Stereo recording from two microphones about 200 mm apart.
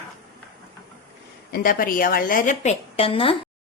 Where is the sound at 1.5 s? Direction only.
45° left (ahead or behind); by 3.3 s 25° left (ahead or behind).